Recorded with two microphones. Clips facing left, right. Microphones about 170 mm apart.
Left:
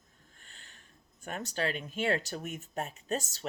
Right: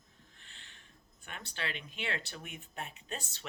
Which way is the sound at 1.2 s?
40° left (ahead or behind).